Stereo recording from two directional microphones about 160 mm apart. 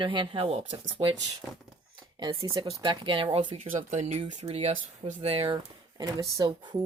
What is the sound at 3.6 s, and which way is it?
Speech, 50° right (ahead or behind).